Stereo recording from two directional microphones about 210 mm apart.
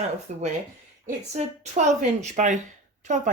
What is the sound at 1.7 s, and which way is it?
Speech, 35° right (ahead or behind).